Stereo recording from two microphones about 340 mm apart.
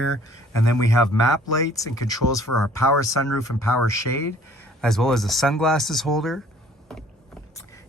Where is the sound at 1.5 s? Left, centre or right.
Centre.